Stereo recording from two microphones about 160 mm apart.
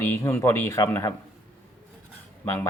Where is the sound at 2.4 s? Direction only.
10° left (ahead or behind).